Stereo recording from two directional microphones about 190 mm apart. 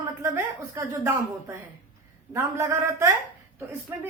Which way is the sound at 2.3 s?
15° right (ahead or behind).